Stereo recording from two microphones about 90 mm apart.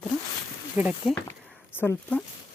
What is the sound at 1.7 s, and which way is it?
Speech, 25° left (ahead or behind).